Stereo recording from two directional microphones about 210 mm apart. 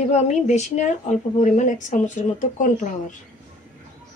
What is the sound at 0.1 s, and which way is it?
Speech, 30° left (ahead or behind).